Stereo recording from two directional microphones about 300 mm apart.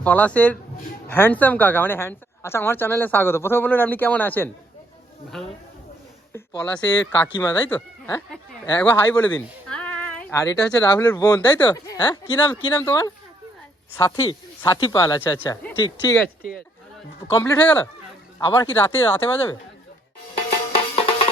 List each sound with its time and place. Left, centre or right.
0.0 s a woman's voice: centre
6.3 s a woman's voice: centre
17.3 s a woman's voice: centre
20.7 s music: centre